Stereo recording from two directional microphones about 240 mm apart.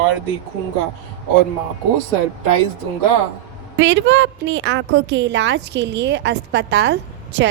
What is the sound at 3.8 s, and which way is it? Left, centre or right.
A woman's voice, right.